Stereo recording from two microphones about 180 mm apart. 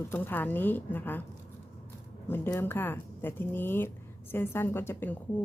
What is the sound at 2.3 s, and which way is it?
Speech, 10° left (ahead or behind).